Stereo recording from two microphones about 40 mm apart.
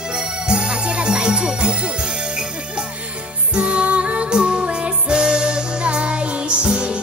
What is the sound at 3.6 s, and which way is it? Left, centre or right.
Music, right.